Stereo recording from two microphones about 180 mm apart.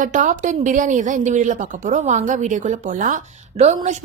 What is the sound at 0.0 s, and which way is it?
A woman's voice, 45° right (ahead or behind).